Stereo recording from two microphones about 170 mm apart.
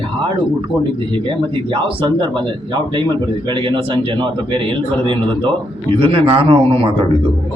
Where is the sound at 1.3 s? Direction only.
30° right (ahead or behind).